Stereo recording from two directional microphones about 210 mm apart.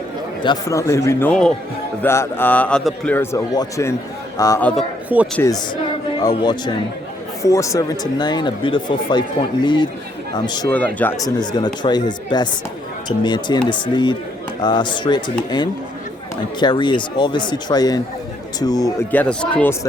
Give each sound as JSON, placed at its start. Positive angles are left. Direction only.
{"t": 0.4, "sound": "a man's voice", "side_deg": 15}
{"t": 4.8, "sound": "a man's voice", "side_deg": -5}
{"t": 6.1, "sound": "speech", "side_deg": 20}
{"t": 10.7, "sound": "a man's voice", "side_deg": 5}
{"t": 11.3, "sound": "a man's voice", "side_deg": 20}